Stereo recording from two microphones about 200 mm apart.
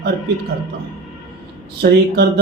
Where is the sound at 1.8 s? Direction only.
60° right (ahead or behind).